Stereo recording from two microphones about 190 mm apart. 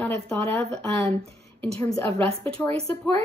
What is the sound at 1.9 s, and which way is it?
Speech, 15° left (ahead or behind).